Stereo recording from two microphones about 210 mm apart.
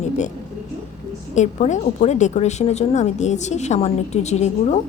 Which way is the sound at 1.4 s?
35° left (ahead or behind).